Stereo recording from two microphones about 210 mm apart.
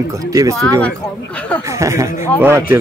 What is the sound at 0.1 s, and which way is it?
Speech, 15° right (ahead or behind).